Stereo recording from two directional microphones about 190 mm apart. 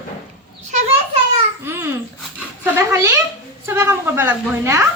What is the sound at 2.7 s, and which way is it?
A woman's voice, 15° right (ahead or behind).